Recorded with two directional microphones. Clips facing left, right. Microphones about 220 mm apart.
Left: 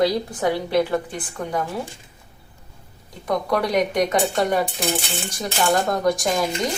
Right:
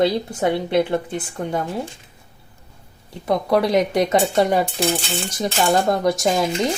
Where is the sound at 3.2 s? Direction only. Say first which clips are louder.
Right 4 dB; 25° right (ahead or behind).